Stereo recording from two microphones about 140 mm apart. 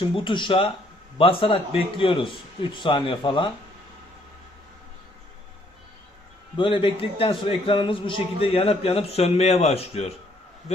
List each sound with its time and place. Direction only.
0.0 s speech: 40° left (ahead or behind)
6.6 s a man's voice: 40° left (ahead or behind)